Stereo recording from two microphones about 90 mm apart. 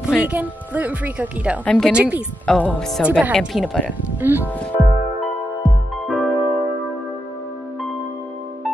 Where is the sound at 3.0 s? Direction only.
15° right (ahead or behind).